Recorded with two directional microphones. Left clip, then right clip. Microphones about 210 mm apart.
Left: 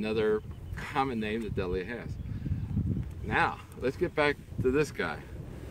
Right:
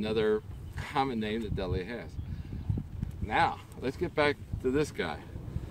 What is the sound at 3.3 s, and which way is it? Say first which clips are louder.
Speech: right 1 dB; centre (ahead or behind).